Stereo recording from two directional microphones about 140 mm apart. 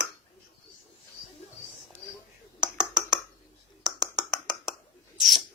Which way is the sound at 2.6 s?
5° right (ahead or behind).